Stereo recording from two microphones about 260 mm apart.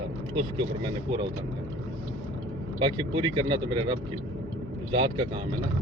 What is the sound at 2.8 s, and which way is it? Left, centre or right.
Speech, centre.